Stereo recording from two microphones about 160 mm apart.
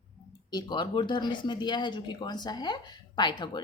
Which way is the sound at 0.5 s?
30° left (ahead or behind).